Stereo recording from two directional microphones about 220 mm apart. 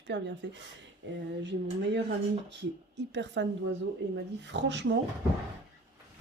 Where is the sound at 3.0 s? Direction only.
55° right (ahead or behind).